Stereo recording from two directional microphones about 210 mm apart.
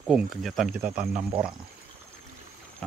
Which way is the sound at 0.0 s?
Centre (ahead or behind).